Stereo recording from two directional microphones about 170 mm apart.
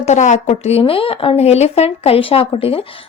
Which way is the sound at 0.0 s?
45° left (ahead or behind).